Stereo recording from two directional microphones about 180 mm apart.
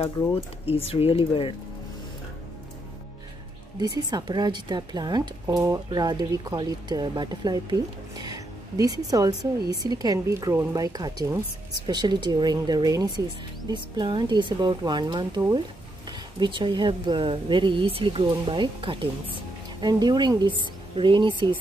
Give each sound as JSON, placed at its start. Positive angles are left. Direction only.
{"t": 0.7, "sound": "speech", "side_deg": 35}
{"t": 3.8, "sound": "speech", "side_deg": -20}